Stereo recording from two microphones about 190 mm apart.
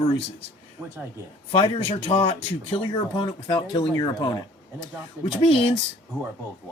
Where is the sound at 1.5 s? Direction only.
25° left (ahead or behind).